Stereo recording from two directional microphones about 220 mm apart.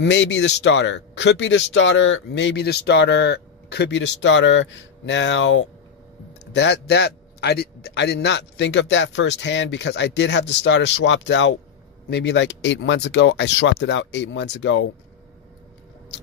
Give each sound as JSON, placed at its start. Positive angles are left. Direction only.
{"t": 0.0, "sound": "a man's voice", "side_deg": 55}